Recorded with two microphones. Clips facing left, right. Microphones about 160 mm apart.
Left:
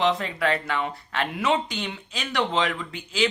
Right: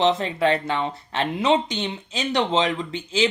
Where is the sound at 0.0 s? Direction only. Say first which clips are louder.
Right 4 dB; 25° right (ahead or behind).